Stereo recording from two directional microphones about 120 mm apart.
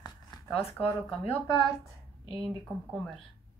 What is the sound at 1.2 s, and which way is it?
Speech, 55° left (ahead or behind).